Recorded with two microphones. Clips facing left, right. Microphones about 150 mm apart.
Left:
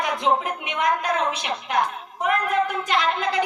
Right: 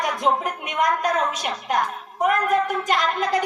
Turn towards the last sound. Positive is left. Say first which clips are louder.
# right 1 dB
turn(degrees=-40)  # may be behind; listen again after turning